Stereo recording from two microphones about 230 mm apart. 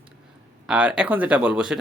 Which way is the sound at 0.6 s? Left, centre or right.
Centre.